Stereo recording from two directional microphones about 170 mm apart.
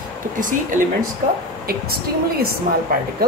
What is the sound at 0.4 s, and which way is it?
Speech, 50° right (ahead or behind).